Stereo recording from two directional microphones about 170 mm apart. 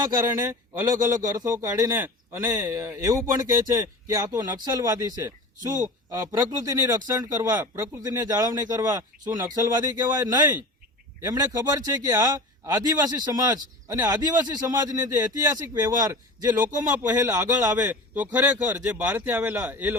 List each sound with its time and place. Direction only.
0.0 s a man's voice: 20° right (ahead or behind)